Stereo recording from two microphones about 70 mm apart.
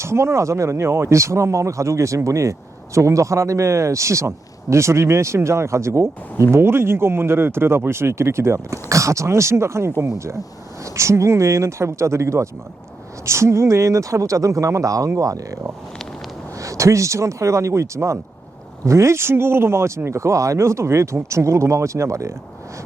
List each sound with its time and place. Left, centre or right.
0.0 s speech: right
16.6 s speech: right